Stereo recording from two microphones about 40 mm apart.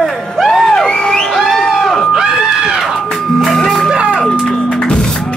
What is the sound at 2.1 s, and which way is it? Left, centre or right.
Crowd, centre.